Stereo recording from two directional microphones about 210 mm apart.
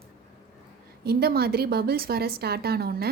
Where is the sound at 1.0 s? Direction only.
50° right (ahead or behind).